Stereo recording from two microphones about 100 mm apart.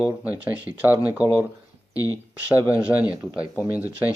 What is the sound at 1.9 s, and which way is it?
Speech, 35° left (ahead or behind).